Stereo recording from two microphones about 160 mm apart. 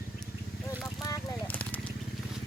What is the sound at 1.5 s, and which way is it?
Fire, 10° left (ahead or behind).